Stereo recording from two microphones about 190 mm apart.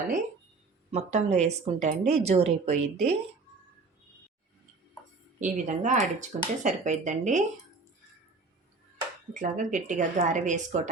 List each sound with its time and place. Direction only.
0.9 s speech: 35° right (ahead or behind)
5.4 s speech: 40° right (ahead or behind)
9.3 s speech: 40° right (ahead or behind)